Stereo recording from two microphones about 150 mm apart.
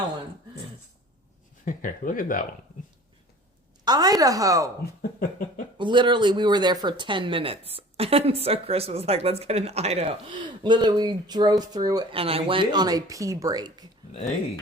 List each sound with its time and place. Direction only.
1.6 s speech: 65° left (ahead or behind)
3.8 s speech: 25° right (ahead or behind)
5.7 s speech: 30° right (ahead or behind)
12.1 s speech: 40° right (ahead or behind)
14.1 s speech: 50° left (ahead or behind)